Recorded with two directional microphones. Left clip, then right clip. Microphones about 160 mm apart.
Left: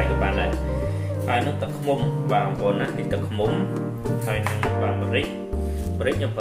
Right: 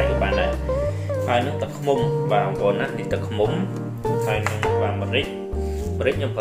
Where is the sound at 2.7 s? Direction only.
45° right (ahead or behind).